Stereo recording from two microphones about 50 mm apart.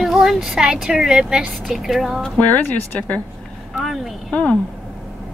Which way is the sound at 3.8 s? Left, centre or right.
Centre.